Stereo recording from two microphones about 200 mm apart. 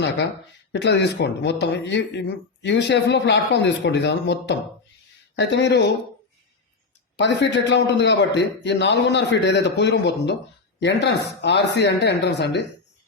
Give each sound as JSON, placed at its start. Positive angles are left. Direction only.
{"t": 0.7, "sound": "speech", "side_deg": 60}
{"t": 7.2, "sound": "speech", "side_deg": 60}